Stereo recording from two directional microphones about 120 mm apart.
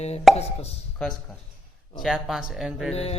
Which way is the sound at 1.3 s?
5° left (ahead or behind).